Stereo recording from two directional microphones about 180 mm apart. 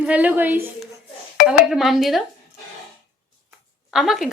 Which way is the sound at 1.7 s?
Centre (ahead or behind).